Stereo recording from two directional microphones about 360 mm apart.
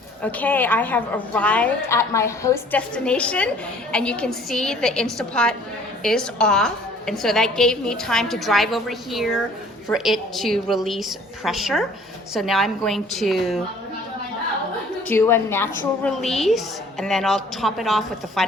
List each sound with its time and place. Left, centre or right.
0.2 s a woman's voice: centre
15.0 s a woman's voice: centre